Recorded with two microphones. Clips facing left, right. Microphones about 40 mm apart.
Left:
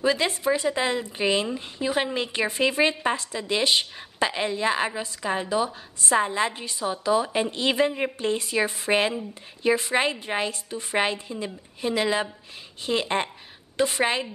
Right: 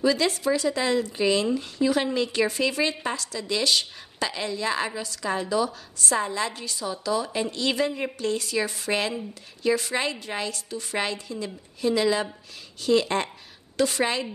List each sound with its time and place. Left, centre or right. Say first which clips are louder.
0.0 s speech: even; left